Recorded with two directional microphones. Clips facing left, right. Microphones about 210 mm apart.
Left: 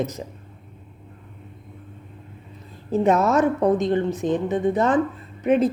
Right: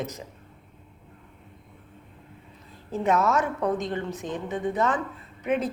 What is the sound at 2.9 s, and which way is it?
A woman's voice, 40° left (ahead or behind).